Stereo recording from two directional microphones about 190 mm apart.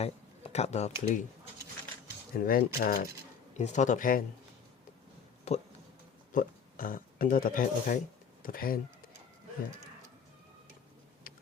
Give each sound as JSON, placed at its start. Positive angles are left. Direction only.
{"t": 0.0, "sound": "speech", "side_deg": 35}
{"t": 2.3, "sound": "speech", "side_deg": 50}
{"t": 3.6, "sound": "speech", "side_deg": 40}
{"t": 5.5, "sound": "speech", "side_deg": 35}
{"t": 6.3, "sound": "speech", "side_deg": 45}